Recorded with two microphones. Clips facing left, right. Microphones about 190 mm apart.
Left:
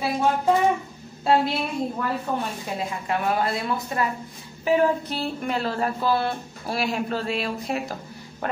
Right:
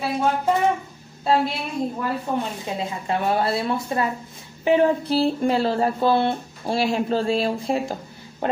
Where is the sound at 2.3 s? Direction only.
20° right (ahead or behind).